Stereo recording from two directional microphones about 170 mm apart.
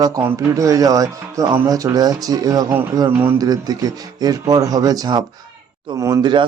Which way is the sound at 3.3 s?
20° right (ahead or behind).